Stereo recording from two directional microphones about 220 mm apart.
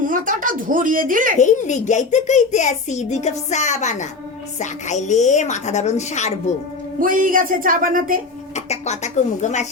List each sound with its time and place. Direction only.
0.0 s speech: 40° right (ahead or behind)
1.4 s a child's voice: 35° left (ahead or behind)
7.0 s speech: 40° right (ahead or behind)
8.5 s speech: 30° left (ahead or behind)